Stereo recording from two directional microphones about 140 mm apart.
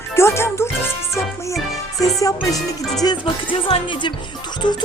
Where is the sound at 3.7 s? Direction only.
40° left (ahead or behind).